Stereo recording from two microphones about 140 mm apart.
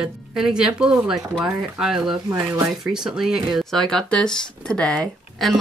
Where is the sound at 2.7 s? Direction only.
5° right (ahead or behind).